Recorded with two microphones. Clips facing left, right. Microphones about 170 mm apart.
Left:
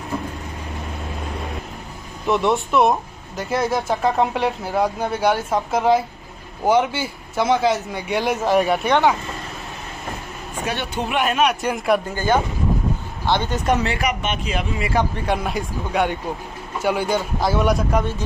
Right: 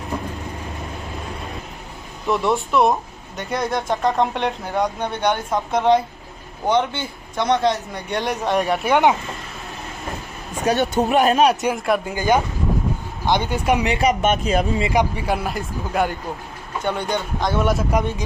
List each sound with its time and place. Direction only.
2.2 s speech: centre (ahead or behind)
10.6 s speech: 40° right (ahead or behind)
11.7 s speech: centre (ahead or behind)
12.1 s speech: 15° right (ahead or behind)
14.2 s speech: 45° right (ahead or behind)
14.8 s speech: 15° right (ahead or behind)
15.2 s speech: 5° right (ahead or behind)